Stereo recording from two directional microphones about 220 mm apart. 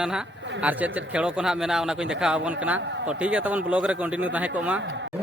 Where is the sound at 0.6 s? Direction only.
5° right (ahead or behind).